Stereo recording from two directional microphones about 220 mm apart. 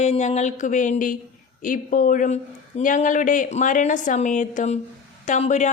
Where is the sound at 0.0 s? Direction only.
30° left (ahead or behind).